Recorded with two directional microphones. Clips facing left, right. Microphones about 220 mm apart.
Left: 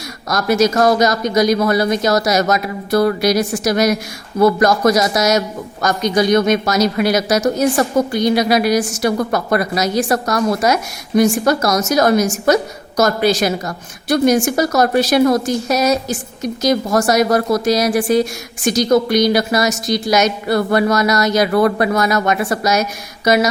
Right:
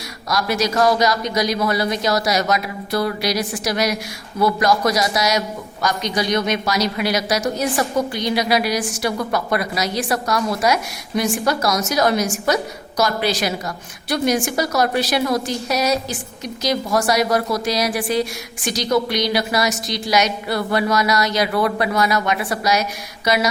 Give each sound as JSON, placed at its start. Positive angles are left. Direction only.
{"t": 0.3, "sound": "a woman's voice", "side_deg": 45}